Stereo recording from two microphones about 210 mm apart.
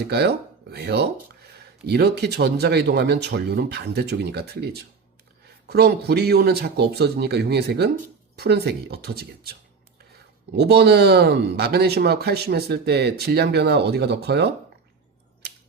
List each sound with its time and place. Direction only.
0.1 s speech: 50° right (ahead or behind)